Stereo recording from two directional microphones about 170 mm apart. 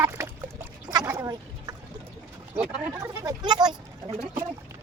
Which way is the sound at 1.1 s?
20° right (ahead or behind).